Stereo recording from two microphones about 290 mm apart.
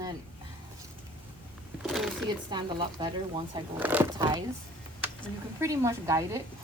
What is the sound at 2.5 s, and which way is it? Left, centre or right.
Speech, centre.